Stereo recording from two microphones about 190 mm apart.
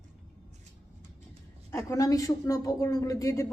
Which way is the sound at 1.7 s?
15° left (ahead or behind).